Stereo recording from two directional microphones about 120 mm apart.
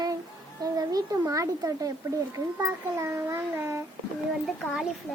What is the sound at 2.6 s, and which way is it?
Child singing, 25° right (ahead or behind).